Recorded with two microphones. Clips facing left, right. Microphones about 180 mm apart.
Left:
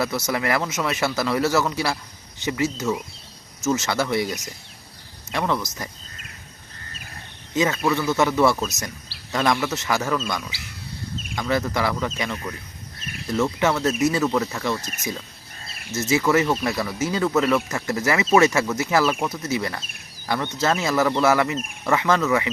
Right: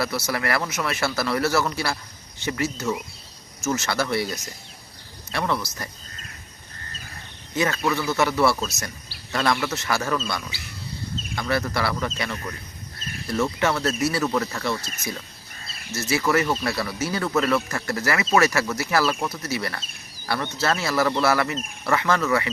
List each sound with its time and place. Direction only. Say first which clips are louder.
0.0 s speech: left 2 dB; 15° left (ahead or behind)
7.5 s speech: left 2 dB; 15° left (ahead or behind)
15.9 s speech: left 3 dB; 20° left (ahead or behind)